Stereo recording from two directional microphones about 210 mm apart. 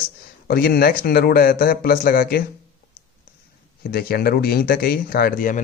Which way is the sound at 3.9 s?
45° left (ahead or behind).